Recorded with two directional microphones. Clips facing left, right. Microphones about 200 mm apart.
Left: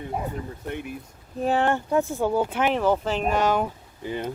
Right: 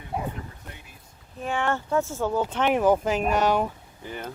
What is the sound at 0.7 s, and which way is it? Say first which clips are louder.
Speech: left 15 dB; 65° left (ahead or behind).